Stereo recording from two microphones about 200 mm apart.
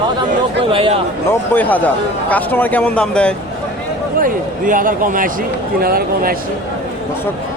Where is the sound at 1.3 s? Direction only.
10° left (ahead or behind).